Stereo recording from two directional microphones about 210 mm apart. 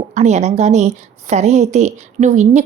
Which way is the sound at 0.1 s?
30° right (ahead or behind).